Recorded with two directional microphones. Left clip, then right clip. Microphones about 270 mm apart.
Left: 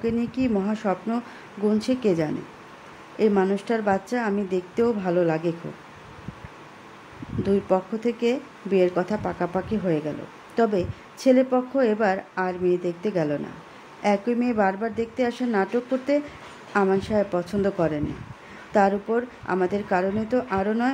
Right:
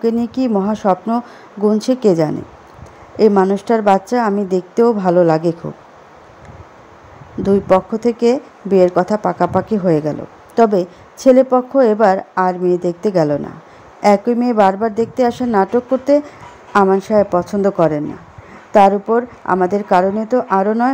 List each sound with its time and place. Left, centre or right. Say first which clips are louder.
0.0 s speech: right 9 dB; right
7.4 s speech: right 10 dB; right